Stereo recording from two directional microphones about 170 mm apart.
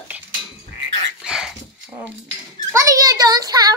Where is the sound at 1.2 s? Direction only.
5° right (ahead or behind).